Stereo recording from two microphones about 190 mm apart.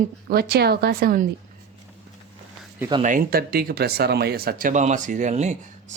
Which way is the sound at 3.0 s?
45° right (ahead or behind).